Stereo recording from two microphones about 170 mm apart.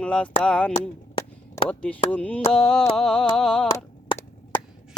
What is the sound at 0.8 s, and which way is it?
Chop, 25° left (ahead or behind).